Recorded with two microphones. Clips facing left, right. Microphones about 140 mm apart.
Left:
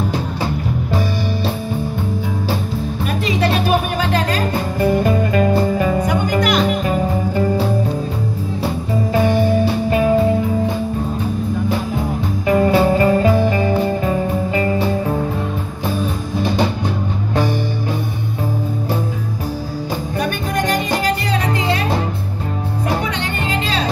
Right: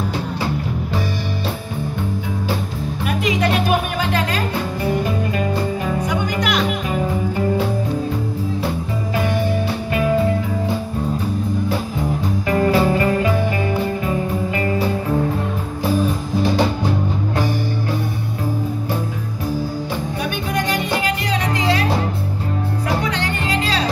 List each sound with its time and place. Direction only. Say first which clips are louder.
5.0 s music: left 5 dB; 50° left (ahead or behind)
9.8 s music: left 3 dB; 30° left (ahead or behind)
12.4 s music: left 3 dB; 20° left (ahead or behind)
20.5 s music: left 2 dB; 45° left (ahead or behind)